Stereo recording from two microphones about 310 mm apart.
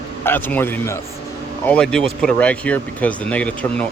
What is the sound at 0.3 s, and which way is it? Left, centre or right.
Speech, centre.